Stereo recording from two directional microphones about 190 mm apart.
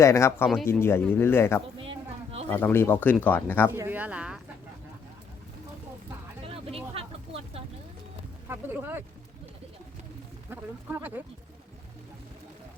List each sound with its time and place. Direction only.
0.0 s speech: 15° left (ahead or behind)
1.8 s a sound: 30° right (ahead or behind)
2.5 s speech: 10° left (ahead or behind)
3.8 s speech: 10° right (ahead or behind)
6.5 s a sound: 30° right (ahead or behind)
8.4 s speech: 10° right (ahead or behind)
10.5 s speech: 10° right (ahead or behind)